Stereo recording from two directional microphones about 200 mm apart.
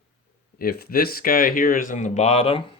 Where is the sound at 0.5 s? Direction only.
50° left (ahead or behind).